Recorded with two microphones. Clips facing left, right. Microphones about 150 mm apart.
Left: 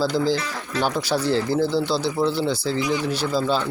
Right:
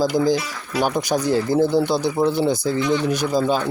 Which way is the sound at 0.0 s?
15° right (ahead or behind).